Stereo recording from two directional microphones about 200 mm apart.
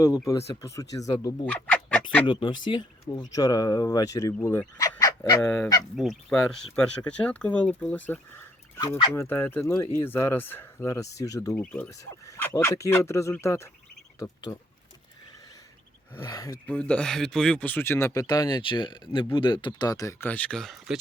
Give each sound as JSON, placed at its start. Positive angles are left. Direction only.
{"t": 0.0, "sound": "speech", "side_deg": 15}
{"t": 1.5, "sound": "speech", "side_deg": 5}
{"t": 2.2, "sound": "speech", "side_deg": 25}
{"t": 5.4, "sound": "speech", "side_deg": 5}
{"t": 16.2, "sound": "speech", "side_deg": 20}